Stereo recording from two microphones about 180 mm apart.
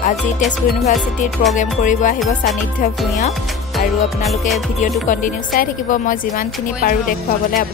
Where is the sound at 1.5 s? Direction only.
45° left (ahead or behind).